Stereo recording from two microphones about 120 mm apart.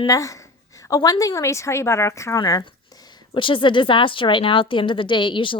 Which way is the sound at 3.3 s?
45° left (ahead or behind).